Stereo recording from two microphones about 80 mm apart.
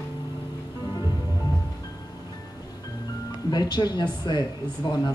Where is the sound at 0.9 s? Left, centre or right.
Left.